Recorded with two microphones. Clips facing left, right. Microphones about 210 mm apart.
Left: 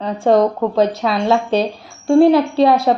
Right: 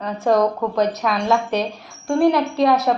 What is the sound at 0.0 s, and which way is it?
A woman's voice, 25° left (ahead or behind).